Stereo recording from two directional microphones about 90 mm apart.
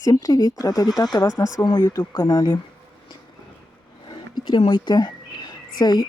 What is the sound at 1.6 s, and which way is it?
Speech, 60° left (ahead or behind).